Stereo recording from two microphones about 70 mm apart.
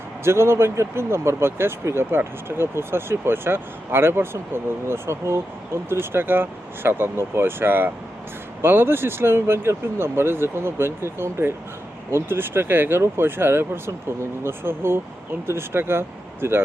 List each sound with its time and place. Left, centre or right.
0.3 s speech: right